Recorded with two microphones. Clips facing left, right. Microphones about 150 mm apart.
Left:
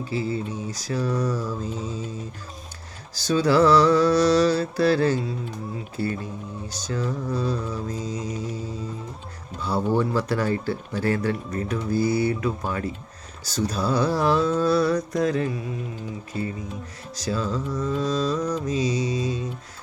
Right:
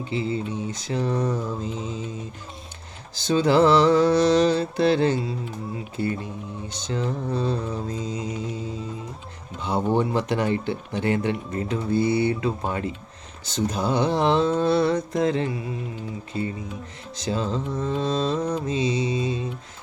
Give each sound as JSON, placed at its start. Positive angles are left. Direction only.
{"t": 0.0, "sound": "speech", "side_deg": -25}
{"t": 3.2, "sound": "speech", "side_deg": -25}
{"t": 17.2, "sound": "speech", "side_deg": -25}